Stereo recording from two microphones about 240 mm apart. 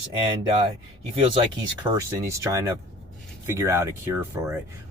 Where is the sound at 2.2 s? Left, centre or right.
Centre.